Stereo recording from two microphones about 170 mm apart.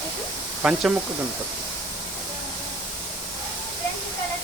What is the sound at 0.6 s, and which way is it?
Speech, 5° right (ahead or behind).